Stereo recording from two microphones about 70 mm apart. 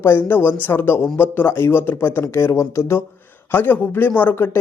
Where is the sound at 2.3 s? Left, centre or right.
Left.